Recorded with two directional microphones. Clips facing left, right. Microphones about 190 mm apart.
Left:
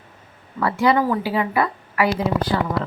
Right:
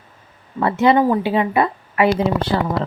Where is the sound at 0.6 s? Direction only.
25° right (ahead or behind).